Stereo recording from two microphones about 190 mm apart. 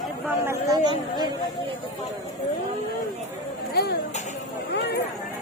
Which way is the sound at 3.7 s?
60° left (ahead or behind).